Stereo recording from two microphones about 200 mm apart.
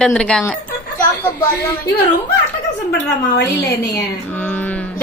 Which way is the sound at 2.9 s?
55° left (ahead or behind).